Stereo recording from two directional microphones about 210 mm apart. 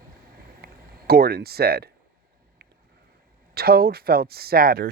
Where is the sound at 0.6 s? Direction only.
45° right (ahead or behind).